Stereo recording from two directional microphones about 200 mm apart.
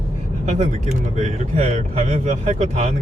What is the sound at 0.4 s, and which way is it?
Speech, 35° right (ahead or behind).